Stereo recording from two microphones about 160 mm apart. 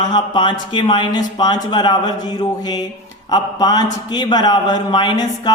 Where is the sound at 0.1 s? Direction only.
30° left (ahead or behind).